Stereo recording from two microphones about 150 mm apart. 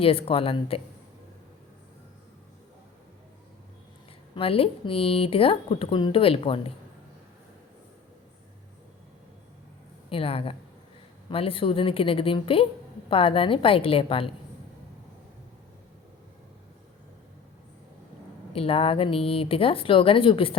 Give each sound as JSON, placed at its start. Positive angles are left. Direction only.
{"t": 0.0, "sound": "speech", "side_deg": 40}
{"t": 4.4, "sound": "speech", "side_deg": 40}
{"t": 10.1, "sound": "speech", "side_deg": 40}
{"t": 18.5, "sound": "speech", "side_deg": 40}